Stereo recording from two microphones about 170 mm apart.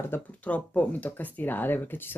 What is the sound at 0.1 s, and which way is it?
Speech, 10° left (ahead or behind).